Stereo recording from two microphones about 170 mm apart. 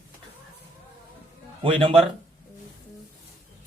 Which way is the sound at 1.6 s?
35° right (ahead or behind).